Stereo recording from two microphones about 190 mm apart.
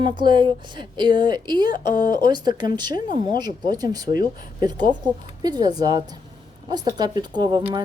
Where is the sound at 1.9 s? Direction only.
45° left (ahead or behind).